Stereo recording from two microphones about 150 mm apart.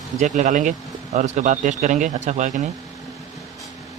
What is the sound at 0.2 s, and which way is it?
Speech, 55° right (ahead or behind).